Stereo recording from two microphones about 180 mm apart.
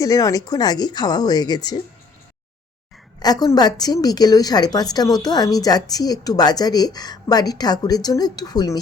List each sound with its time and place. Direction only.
0.0 s a woman's voice: 20° left (ahead or behind)
3.2 s a woman's voice: 20° left (ahead or behind)